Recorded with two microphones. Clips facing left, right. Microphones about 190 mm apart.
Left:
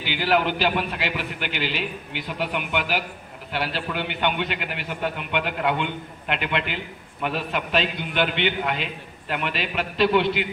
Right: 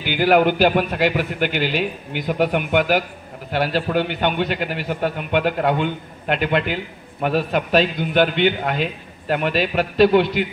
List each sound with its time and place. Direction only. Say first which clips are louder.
0.0 s a man's voice: right 7 dB; 50° right (ahead or behind)